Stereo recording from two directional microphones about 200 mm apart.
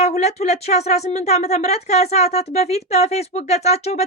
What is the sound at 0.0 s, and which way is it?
Speech, 35° left (ahead or behind).